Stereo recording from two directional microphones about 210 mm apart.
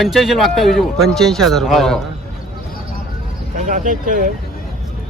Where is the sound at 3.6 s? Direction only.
40° right (ahead or behind).